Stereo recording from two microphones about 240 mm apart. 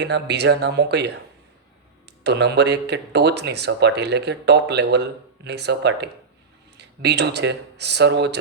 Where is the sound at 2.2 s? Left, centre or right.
Right.